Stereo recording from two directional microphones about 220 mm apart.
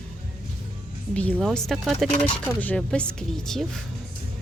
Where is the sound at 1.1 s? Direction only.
5° left (ahead or behind).